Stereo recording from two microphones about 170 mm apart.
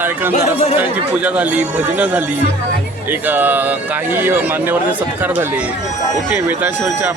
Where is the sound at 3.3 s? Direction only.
10° right (ahead or behind).